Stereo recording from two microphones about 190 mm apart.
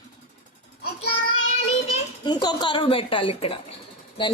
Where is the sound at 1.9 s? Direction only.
20° left (ahead or behind).